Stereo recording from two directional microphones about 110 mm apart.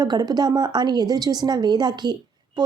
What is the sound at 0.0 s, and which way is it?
A woman's voice, 35° right (ahead or behind).